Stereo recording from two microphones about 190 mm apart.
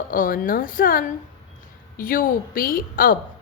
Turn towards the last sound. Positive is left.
turn(degrees=50)  # may be behind; listen again after turning